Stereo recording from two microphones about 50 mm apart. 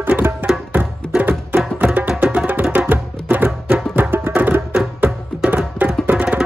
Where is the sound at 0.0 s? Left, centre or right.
Right.